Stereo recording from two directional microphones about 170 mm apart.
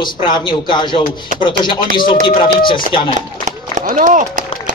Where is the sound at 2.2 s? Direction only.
30° left (ahead or behind).